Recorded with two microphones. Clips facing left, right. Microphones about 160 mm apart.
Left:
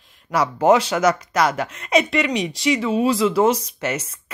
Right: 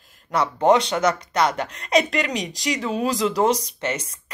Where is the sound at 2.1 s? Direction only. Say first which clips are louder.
Left 4 dB; 40° right (ahead or behind).